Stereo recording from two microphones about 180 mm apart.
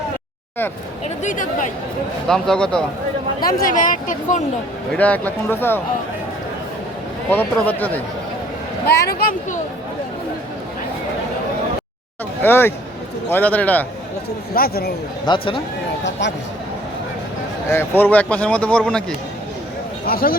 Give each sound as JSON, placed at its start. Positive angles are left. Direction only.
{"t": 1.0, "sound": "speech", "side_deg": 45}
{"t": 2.2, "sound": "speech", "side_deg": 5}
{"t": 3.4, "sound": "speech", "side_deg": 45}
{"t": 4.9, "sound": "speech", "side_deg": 10}
{"t": 7.3, "sound": "speech", "side_deg": 10}
{"t": 8.9, "sound": "speech", "side_deg": 60}
{"t": 12.4, "sound": "speech", "side_deg": 10}
{"t": 14.5, "sound": "speech", "side_deg": 55}
{"t": 15.3, "sound": "speech", "side_deg": 30}
{"t": 17.7, "sound": "speech", "side_deg": 15}
{"t": 20.1, "sound": "speech", "side_deg": 55}